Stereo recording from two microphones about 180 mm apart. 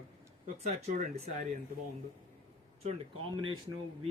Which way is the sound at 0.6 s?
40° right (ahead or behind).